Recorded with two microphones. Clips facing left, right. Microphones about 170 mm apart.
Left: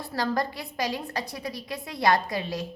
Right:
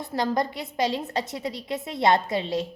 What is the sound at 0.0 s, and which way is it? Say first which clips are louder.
A woman's voice: right 2 dB; 20° right (ahead or behind).